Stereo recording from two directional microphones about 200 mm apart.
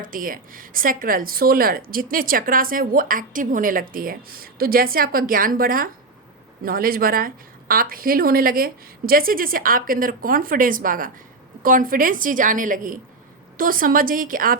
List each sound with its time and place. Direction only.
0.0 s speech: 45° right (ahead or behind)